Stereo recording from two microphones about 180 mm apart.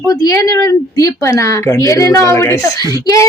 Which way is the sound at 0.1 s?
20° left (ahead or behind).